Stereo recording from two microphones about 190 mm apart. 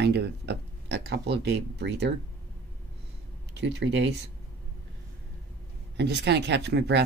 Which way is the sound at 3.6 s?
65° right (ahead or behind).